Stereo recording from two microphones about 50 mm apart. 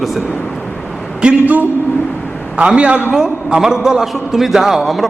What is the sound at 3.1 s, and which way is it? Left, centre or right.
Mantra, centre.